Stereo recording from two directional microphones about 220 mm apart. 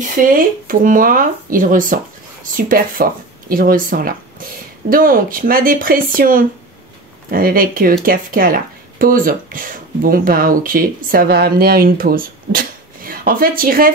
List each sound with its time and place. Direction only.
0.0 s speech: 40° right (ahead or behind)